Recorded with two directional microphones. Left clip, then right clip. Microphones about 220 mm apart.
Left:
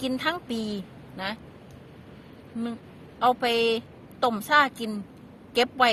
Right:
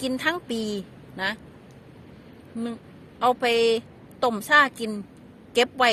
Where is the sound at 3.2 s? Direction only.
15° right (ahead or behind).